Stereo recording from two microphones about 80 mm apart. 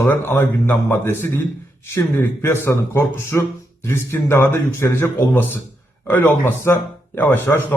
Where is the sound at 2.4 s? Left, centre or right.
Left.